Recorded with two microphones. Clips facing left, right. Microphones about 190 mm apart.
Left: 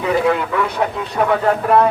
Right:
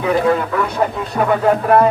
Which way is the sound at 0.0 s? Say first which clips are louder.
Right 1 dB; centre (ahead or behind).